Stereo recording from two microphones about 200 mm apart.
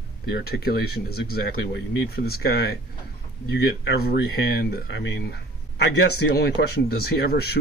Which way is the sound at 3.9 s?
55° left (ahead or behind).